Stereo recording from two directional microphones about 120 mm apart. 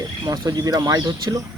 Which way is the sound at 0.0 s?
30° right (ahead or behind).